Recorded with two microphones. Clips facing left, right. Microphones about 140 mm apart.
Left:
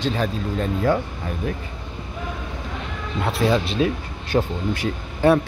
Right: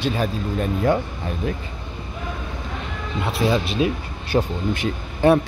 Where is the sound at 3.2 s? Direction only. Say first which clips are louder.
Left 1 dB; 5° right (ahead or behind).